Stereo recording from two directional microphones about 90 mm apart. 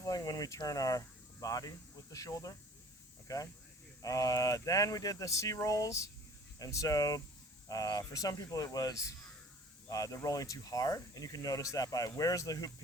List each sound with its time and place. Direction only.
0.0 s speech: 45° left (ahead or behind)